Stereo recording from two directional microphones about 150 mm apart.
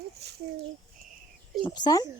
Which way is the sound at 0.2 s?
90° right.